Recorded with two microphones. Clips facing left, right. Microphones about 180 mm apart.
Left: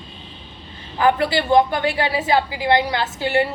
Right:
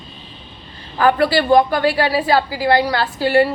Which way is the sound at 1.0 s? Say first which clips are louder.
Right 3 dB; 20° left (ahead or behind).